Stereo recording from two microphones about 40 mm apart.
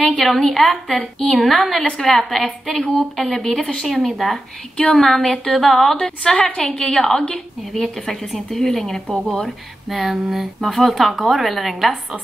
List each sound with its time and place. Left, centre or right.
0.2 s speech: centre
6.0 s a woman's voice: left
7.1 s speech: centre
9.8 s speech: centre